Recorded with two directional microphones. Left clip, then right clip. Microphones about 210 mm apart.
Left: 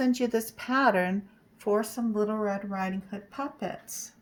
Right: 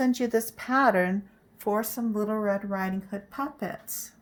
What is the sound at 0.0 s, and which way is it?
Speech, 15° right (ahead or behind).